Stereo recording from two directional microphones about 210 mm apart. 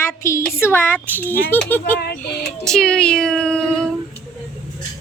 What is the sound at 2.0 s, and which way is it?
Speech, 50° left (ahead or behind).